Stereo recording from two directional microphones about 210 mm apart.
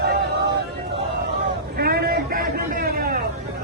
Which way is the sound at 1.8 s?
45° right (ahead or behind).